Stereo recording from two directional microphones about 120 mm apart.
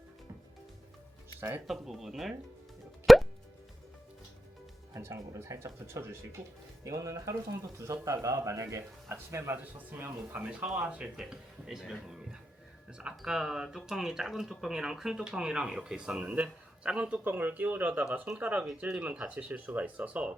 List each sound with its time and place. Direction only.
1.6 s speech: centre (ahead or behind)
3.1 s plop: centre (ahead or behind)
4.9 s speech: 25° right (ahead or behind)
6.4 s speech: 65° right (ahead or behind)
6.8 s speech: 25° right (ahead or behind)